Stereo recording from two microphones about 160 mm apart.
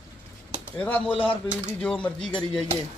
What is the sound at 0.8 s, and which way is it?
Speech, 10° left (ahead or behind).